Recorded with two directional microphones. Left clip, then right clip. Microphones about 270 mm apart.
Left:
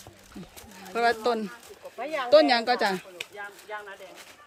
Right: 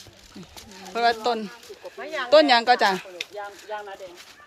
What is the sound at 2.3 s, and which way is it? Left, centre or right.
Speech, centre.